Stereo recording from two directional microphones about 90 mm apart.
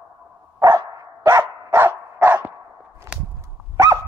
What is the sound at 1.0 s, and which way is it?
Dog, 35° right (ahead or behind).